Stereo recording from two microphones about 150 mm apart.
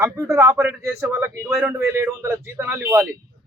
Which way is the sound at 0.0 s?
20° right (ahead or behind).